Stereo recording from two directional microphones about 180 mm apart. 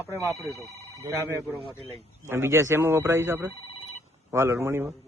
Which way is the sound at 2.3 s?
15° right (ahead or behind).